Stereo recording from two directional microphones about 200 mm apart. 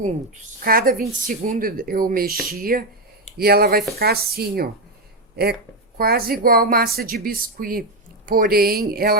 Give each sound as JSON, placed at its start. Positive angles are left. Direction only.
{"t": 0.6, "sound": "a woman's voice", "side_deg": -45}
{"t": 6.0, "sound": "a woman's voice", "side_deg": -50}